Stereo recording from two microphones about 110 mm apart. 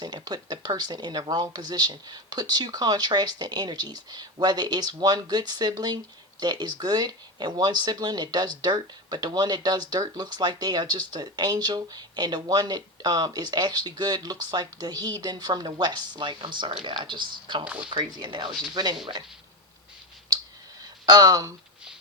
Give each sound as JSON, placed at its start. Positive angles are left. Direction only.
{"t": 0.0, "sound": "speech", "side_deg": -40}
{"t": 21.1, "sound": "speech", "side_deg": -35}